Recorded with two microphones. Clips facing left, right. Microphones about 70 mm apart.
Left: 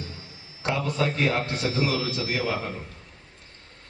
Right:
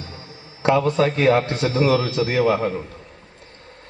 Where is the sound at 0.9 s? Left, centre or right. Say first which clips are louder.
Right 8 dB; right.